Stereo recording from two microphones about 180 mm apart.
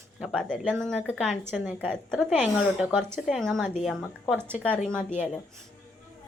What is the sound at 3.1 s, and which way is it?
Speech, centre (ahead or behind).